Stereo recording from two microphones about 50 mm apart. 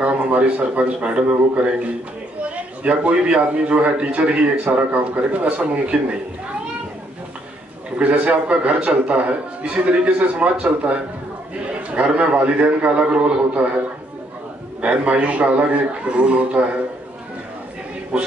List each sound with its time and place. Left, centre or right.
0.0 s a man's voice: right
2.4 s a man's voice: right
8.0 s speech: right
14.8 s speech: right
18.1 s speech: centre